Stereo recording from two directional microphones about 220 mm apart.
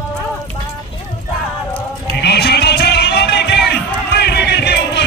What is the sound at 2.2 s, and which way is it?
Music, 45° left (ahead or behind).